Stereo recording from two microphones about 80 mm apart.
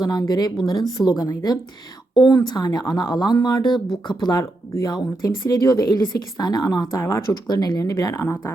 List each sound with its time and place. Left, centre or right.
0.0 s speech: left
4.7 s speech: left
7.4 s speech: left